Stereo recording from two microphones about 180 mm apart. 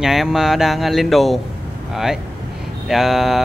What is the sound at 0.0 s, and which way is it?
Speech, centre (ahead or behind).